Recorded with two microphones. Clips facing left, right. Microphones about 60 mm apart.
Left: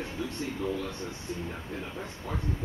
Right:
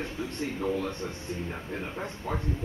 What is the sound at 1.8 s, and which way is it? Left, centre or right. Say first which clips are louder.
Speech: right 3 dB; right.